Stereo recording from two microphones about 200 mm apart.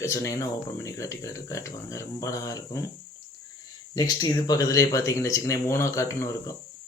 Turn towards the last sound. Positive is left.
turn(degrees=15)  # may be behind; listen again after turning